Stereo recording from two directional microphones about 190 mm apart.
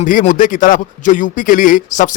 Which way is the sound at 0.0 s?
45° left (ahead or behind).